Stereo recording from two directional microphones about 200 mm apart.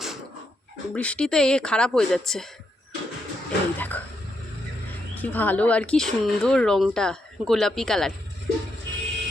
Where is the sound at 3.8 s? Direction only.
10° left (ahead or behind).